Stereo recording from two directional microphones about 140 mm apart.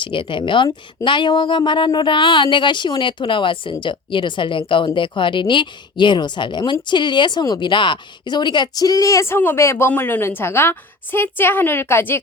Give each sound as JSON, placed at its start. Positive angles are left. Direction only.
{"t": 0.0, "sound": "a woman's voice", "side_deg": 35}